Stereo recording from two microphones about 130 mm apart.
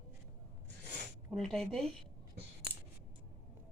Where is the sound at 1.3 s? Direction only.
5° left (ahead or behind).